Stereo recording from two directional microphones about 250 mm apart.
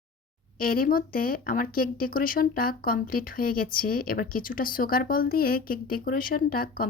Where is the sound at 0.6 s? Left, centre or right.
Left.